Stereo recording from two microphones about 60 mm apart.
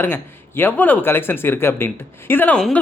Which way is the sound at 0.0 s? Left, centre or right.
Left.